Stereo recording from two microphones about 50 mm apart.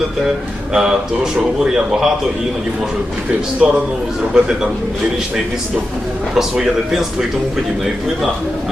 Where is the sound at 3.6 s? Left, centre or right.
Centre.